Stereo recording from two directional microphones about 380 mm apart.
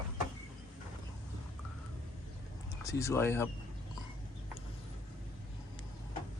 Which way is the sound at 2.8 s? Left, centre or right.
Centre.